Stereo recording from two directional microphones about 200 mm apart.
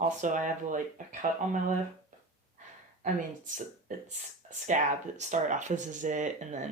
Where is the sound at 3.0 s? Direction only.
40° right (ahead or behind).